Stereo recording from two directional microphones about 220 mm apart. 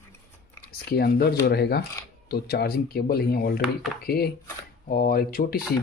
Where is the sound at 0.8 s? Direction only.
45° left (ahead or behind).